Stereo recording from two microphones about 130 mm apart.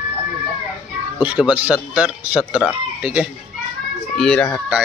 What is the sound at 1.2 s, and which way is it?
A man's voice, 10° right (ahead or behind).